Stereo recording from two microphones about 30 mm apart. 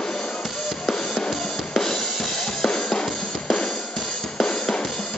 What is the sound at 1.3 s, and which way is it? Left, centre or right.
Drum kit, centre.